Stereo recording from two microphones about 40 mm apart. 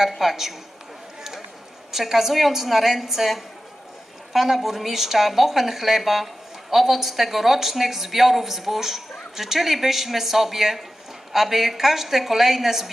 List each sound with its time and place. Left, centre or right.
0.1 s speech: centre
1.9 s a woman's voice: centre